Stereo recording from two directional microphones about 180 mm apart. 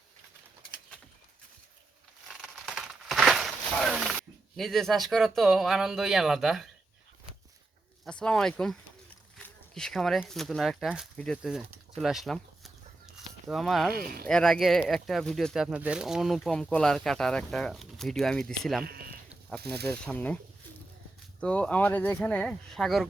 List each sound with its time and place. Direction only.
2.2 s crumpling: centre (ahead or behind)
8.0 s speech: 5° left (ahead or behind)
19.6 s speech: 65° right (ahead or behind)
19.9 s speech: 10° left (ahead or behind)
21.4 s speech: 5° left (ahead or behind)